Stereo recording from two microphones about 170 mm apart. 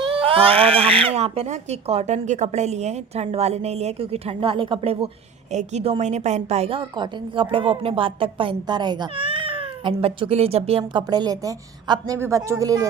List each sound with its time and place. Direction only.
0.0 s a woman's voice: 30° right (ahead or behind)